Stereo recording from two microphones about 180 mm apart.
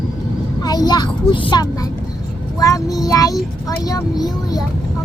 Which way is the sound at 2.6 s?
20° left (ahead or behind).